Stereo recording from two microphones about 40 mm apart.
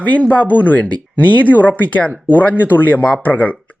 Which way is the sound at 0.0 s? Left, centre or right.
Left.